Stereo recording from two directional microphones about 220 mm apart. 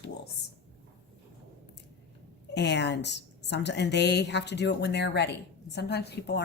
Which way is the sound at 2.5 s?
50° left (ahead or behind).